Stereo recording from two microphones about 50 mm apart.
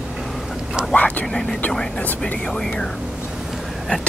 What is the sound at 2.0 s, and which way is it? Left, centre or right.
Speech, left.